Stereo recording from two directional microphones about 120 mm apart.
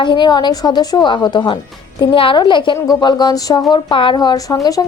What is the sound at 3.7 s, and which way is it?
A woman's voice, 45° left (ahead or behind).